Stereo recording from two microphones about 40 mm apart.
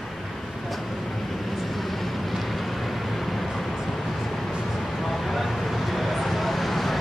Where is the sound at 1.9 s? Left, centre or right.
Centre.